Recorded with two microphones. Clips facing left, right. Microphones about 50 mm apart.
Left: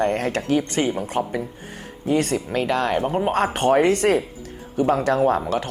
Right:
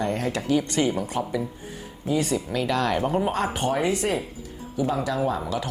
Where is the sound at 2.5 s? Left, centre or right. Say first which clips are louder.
Left 3 dB; left.